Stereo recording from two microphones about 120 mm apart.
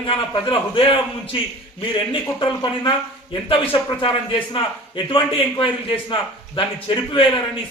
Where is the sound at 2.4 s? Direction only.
40° left (ahead or behind).